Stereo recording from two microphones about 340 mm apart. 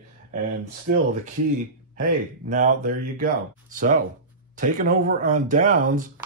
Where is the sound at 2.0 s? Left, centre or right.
Right.